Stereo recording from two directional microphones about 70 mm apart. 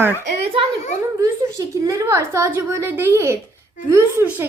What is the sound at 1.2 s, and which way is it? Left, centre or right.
A woman's voice, right.